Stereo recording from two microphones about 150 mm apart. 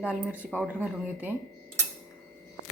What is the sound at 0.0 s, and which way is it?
Speech, 10° right (ahead or behind).